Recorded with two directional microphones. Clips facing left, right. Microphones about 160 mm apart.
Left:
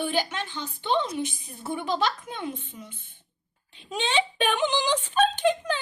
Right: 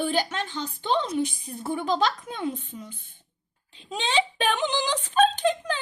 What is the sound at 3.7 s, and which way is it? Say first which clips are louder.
A child's voice: right 1 dB; 35° right (ahead or behind).